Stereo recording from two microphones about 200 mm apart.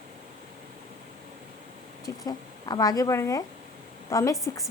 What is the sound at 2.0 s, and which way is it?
A woman's voice, 20° left (ahead or behind).